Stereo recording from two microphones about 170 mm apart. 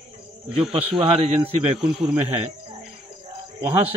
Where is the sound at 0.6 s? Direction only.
35° right (ahead or behind).